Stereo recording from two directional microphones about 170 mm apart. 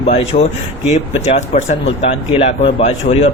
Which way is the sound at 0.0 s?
40° left (ahead or behind).